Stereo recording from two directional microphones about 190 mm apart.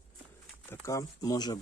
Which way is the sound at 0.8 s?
20° left (ahead or behind).